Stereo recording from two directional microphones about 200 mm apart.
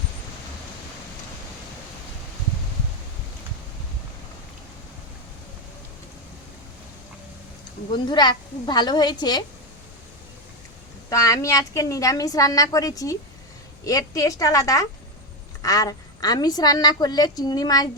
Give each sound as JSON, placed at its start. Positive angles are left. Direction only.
{"t": 7.9, "sound": "a woman's voice", "side_deg": 20}
{"t": 11.1, "sound": "a woman's voice", "side_deg": 15}